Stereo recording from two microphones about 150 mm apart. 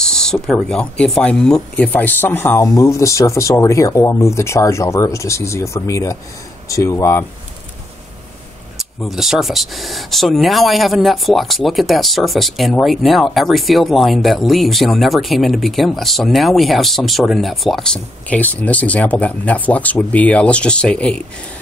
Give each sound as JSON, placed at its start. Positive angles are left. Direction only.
{"t": 0.0, "sound": "speech", "side_deg": 5}
{"t": 8.7, "sound": "speech", "side_deg": 0}